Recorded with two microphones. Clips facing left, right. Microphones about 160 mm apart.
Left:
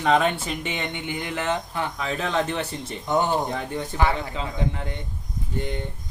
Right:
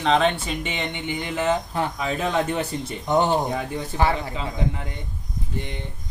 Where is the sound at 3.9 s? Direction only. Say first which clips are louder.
Right 2 dB; 30° right (ahead or behind).